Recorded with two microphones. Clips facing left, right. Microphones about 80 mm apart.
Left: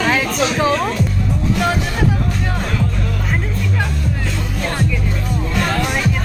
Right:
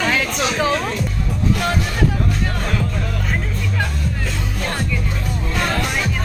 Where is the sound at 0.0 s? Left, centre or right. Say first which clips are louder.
Left 2 dB; centre.